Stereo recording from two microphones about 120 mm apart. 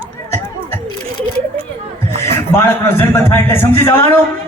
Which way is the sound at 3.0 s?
20° left (ahead or behind).